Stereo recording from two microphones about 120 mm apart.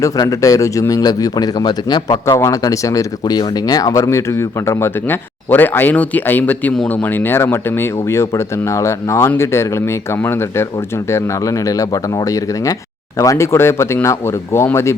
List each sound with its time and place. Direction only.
0.0 s speech: 25° left (ahead or behind)
11.1 s speech: 25° left (ahead or behind)
13.1 s speech: 25° left (ahead or behind)